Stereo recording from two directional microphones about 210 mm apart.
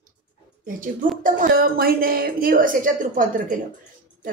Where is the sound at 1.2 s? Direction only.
45° right (ahead or behind).